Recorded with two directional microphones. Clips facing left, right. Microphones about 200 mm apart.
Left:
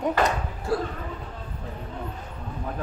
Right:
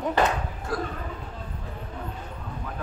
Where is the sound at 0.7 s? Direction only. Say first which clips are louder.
Left 4 dB; 30° left (ahead or behind).